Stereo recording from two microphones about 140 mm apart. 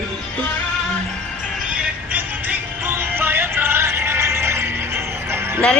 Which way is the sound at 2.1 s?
10° right (ahead or behind).